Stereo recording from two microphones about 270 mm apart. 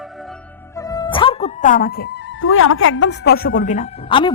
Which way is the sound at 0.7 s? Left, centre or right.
Centre.